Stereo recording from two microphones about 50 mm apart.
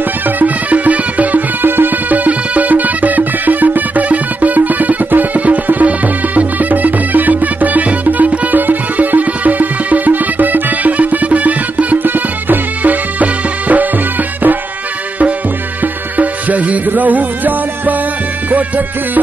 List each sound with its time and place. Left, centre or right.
0.4 s music: right
15.8 s music: right